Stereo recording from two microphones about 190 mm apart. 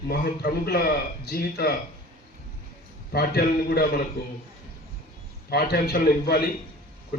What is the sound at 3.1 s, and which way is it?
Speech, 55° left (ahead or behind).